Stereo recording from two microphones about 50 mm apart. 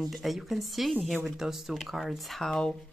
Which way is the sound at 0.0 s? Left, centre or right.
Centre.